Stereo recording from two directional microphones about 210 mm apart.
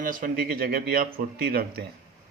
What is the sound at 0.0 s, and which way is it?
Speech, 40° right (ahead or behind).